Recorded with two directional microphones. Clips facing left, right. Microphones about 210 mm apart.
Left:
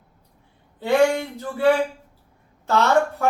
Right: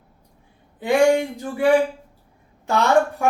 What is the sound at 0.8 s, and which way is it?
Speech, 15° right (ahead or behind).